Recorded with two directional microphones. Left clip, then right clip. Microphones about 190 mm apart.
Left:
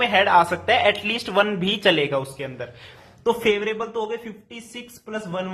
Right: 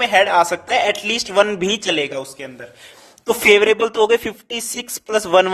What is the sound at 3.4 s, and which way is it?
A man's voice, 55° right (ahead or behind).